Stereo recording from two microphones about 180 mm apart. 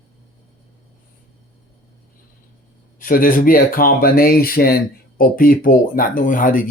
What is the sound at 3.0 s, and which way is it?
Speech, 50° left (ahead or behind).